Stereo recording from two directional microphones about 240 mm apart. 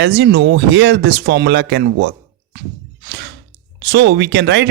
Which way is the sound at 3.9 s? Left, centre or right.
Right.